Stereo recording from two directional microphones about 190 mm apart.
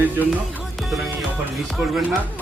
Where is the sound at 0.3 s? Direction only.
Centre (ahead or behind).